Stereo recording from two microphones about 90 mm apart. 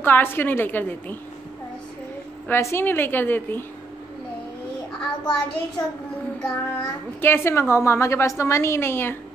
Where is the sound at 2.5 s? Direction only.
30° left (ahead or behind).